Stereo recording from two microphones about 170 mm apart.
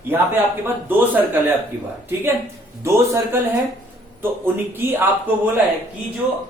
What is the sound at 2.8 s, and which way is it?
Speech, 15° right (ahead or behind).